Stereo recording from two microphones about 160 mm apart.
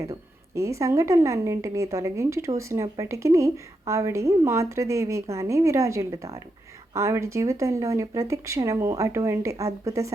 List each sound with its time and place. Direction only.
0.0 s a woman's voice: 20° right (ahead or behind)